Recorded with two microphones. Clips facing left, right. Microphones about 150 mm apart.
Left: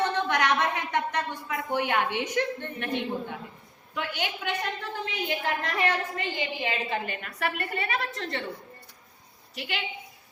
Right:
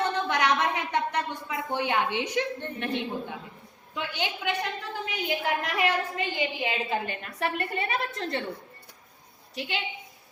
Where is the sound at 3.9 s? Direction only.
20° right (ahead or behind).